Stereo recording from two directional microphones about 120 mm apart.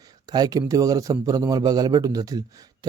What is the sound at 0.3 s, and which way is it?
A man's voice, 35° right (ahead or behind).